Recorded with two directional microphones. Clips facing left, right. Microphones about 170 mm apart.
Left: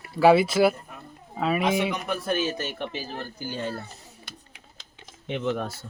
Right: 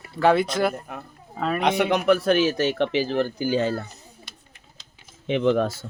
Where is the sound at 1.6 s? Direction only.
70° right (ahead or behind); by 3.8 s 90° right.